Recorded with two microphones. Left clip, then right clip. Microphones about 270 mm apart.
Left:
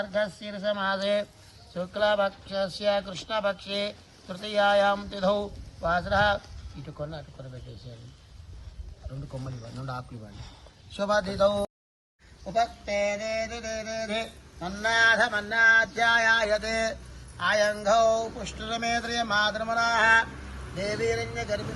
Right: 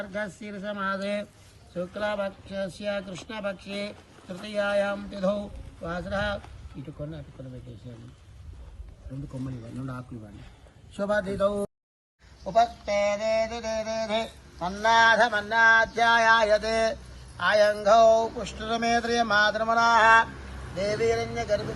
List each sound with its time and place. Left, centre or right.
0.1 s a man's voice: centre
11.0 s a man's voice: left
12.6 s speech: right